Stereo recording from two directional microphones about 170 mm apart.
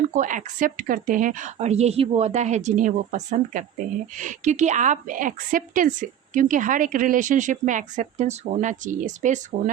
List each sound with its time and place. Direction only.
0.1 s a woman's voice: 50° right (ahead or behind)